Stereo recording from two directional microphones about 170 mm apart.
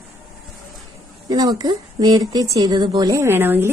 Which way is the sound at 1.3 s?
20° right (ahead or behind).